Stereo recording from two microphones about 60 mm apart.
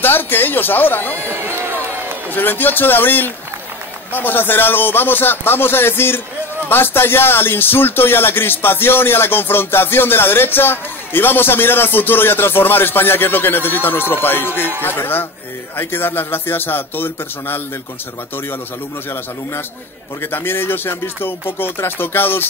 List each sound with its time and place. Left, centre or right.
0.0 s speech: left
1.2 s run: right
2.3 s speech: left
20.2 s speech: left